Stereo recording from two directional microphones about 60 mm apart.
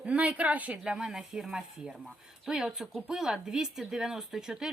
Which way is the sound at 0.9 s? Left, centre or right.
Centre.